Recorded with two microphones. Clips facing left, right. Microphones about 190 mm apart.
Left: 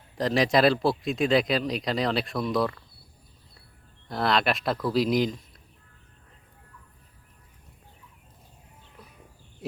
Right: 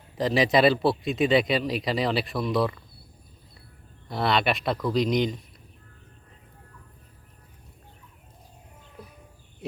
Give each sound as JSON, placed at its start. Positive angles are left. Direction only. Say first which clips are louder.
{"t": 0.2, "sound": "speech", "louder": "right 1 dB", "side_deg": 0}
{"t": 4.1, "sound": "speech", "louder": "even", "side_deg": 0}